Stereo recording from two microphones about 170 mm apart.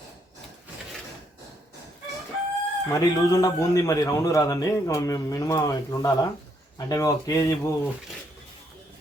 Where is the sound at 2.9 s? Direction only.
20° left (ahead or behind).